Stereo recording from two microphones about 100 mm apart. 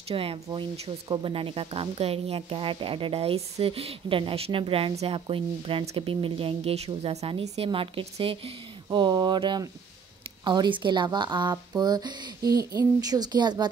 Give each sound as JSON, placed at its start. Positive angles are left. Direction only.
{"t": 0.1, "sound": "speech", "side_deg": -70}
{"t": 0.5, "sound": "speech", "side_deg": -55}
{"t": 8.9, "sound": "speech", "side_deg": -45}